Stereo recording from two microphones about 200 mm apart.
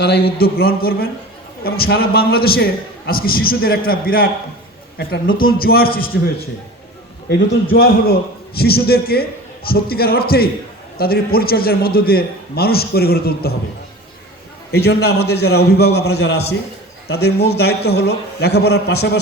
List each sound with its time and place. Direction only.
0.0 s a man's voice: 50° left (ahead or behind)
14.7 s a man's voice: 55° left (ahead or behind)